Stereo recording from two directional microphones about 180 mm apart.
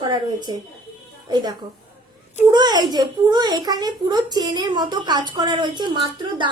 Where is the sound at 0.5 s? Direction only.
25° right (ahead or behind).